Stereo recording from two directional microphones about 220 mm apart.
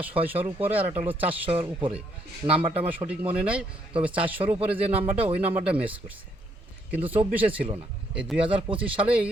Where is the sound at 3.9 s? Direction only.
25° right (ahead or behind).